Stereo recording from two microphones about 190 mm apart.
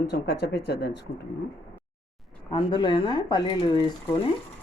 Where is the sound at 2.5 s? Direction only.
25° left (ahead or behind).